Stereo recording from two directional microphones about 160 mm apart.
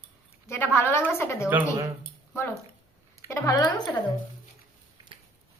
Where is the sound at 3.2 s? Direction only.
20° left (ahead or behind).